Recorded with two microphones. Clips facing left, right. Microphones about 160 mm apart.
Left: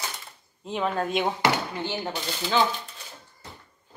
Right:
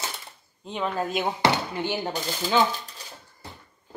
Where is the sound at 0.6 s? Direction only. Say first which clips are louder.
Left 1 dB; centre (ahead or behind).